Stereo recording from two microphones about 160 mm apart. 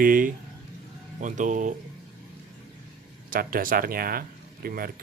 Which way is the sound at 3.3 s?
60° right (ahead or behind).